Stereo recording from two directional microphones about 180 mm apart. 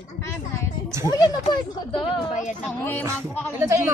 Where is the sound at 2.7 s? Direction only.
10° left (ahead or behind).